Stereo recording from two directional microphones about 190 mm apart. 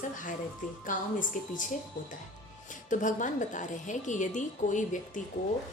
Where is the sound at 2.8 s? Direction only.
40° left (ahead or behind).